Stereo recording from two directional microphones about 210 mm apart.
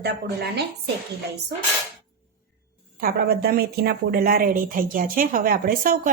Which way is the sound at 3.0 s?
45° right (ahead or behind).